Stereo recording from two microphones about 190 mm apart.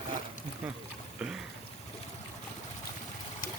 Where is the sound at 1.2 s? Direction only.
5° right (ahead or behind).